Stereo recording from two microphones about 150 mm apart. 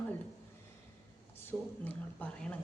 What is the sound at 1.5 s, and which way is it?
A woman's voice, 10° left (ahead or behind).